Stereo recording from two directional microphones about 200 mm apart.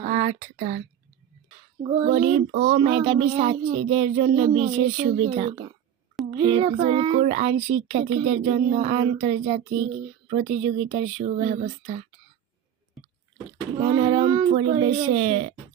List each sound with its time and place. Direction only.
0.0 s speech: 40° right (ahead or behind)
1.8 s speech: 25° right (ahead or behind)
13.7 s speech: 25° right (ahead or behind)